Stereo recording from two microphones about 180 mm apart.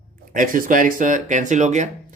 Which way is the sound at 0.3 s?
50° right (ahead or behind).